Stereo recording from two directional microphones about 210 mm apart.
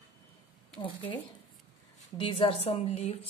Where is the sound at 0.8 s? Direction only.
20° left (ahead or behind).